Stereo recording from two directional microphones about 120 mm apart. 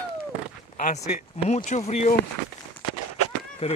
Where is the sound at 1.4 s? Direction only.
75° left (ahead or behind).